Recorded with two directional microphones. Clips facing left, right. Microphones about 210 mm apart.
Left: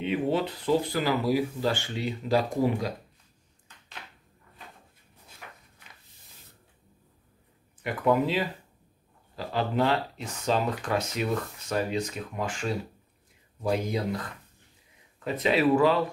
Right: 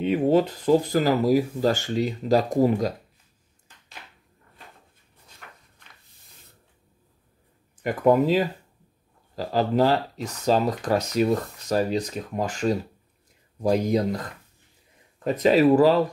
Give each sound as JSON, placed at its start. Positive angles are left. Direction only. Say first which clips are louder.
{"t": 0.0, "sound": "speech", "louder": "right 7 dB", "side_deg": -40}
{"t": 7.8, "sound": "speech", "louder": "right 5 dB", "side_deg": -45}
{"t": 15.2, "sound": "speech", "louder": "right 6 dB", "side_deg": -40}